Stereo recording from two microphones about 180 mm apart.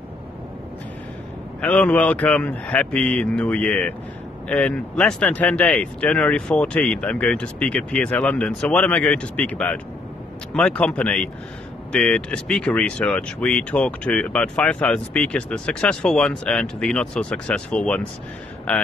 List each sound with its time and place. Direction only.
1.6 s speech: 10° left (ahead or behind)